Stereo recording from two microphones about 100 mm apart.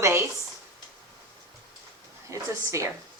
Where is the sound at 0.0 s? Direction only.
25° right (ahead or behind).